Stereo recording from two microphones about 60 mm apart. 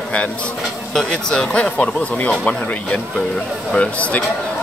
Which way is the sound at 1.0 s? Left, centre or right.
Centre.